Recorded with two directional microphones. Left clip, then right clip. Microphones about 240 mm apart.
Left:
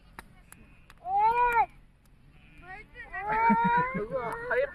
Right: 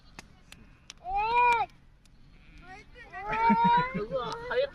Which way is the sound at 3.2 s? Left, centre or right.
Right.